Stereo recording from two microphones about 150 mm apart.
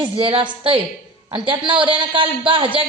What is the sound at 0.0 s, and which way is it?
A woman's voice, 35° right (ahead or behind).